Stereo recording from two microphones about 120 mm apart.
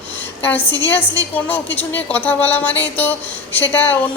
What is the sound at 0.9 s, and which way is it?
A woman's voice, 15° left (ahead or behind).